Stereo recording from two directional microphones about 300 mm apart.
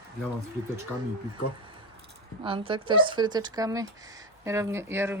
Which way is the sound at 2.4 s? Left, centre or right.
Centre.